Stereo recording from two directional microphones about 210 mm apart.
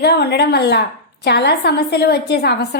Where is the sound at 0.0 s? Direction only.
50° left (ahead or behind).